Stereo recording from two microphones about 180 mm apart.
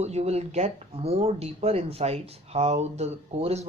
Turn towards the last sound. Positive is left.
turn(degrees=-35)  # may be behind; listen again after turning